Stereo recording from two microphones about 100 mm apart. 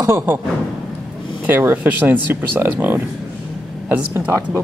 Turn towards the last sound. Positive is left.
turn(degrees=-15)  # may be behind; listen again after turning